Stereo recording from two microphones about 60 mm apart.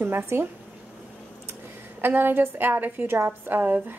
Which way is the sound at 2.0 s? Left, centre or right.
Right.